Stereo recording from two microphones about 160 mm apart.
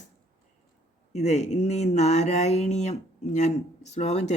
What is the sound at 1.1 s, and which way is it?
Speech, 45° left (ahead or behind).